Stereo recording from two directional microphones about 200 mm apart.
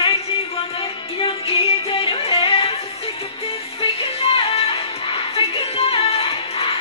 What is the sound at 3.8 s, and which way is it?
Music, 30° left (ahead or behind).